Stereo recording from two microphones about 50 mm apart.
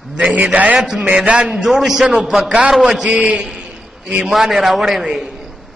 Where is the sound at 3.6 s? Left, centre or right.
Centre.